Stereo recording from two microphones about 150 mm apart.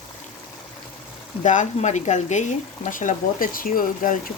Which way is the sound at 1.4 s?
55° left (ahead or behind).